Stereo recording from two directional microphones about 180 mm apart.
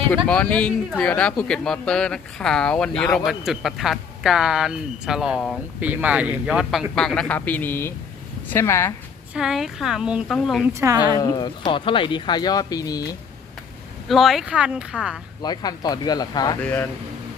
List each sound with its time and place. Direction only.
0.3 s speech: 5° left (ahead or behind)
9.3 s speech: centre (ahead or behind)
10.8 s speech: 15° right (ahead or behind)
11.2 s speech: 20° left (ahead or behind)
14.1 s speech: centre (ahead or behind)
15.4 s speech: 20° left (ahead or behind)
16.6 s speech: 10° left (ahead or behind)